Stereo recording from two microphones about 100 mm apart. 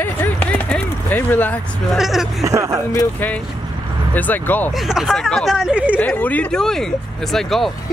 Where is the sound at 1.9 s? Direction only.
5° right (ahead or behind).